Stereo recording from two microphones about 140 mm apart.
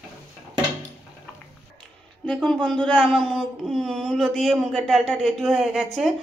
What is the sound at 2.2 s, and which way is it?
Speech, 5° left (ahead or behind).